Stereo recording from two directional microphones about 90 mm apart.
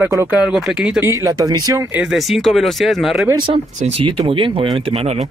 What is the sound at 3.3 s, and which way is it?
Speech, 75° right (ahead or behind).